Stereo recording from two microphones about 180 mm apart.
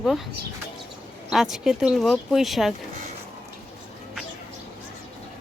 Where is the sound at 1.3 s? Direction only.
Centre (ahead or behind).